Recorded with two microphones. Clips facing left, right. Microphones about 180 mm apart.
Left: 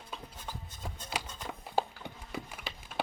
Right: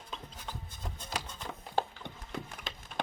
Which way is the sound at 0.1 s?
10° left (ahead or behind).